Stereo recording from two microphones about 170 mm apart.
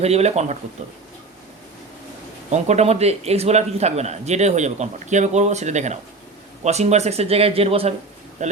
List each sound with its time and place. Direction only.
0.0 s a man's voice: 40° right (ahead or behind)
2.5 s a man's voice: 40° right (ahead or behind)